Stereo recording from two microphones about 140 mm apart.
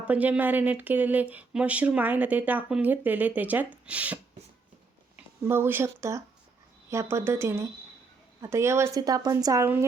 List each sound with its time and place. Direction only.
0.1 s speech: 10° right (ahead or behind)